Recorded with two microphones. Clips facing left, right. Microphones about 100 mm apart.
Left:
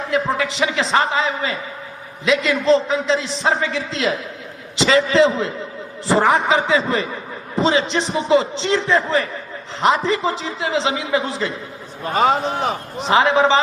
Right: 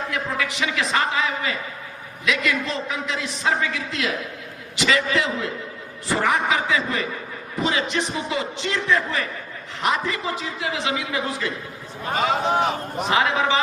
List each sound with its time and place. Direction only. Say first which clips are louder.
0.1 s a man's voice: left 6 dB; 30° left (ahead or behind)
13.1 s a man's voice: left 6 dB; 30° left (ahead or behind)